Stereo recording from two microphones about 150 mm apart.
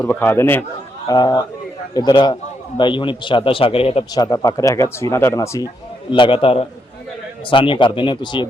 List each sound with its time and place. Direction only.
0.0 s speech: 15° left (ahead or behind)
1.0 s a man's voice: 25° left (ahead or behind)
4.1 s speech: 25° left (ahead or behind)
6.1 s a man's voice: 35° left (ahead or behind)